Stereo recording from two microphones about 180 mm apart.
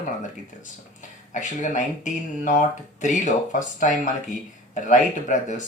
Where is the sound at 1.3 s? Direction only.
45° left (ahead or behind).